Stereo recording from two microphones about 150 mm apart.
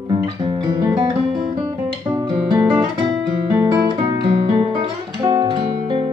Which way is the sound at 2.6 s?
15° right (ahead or behind).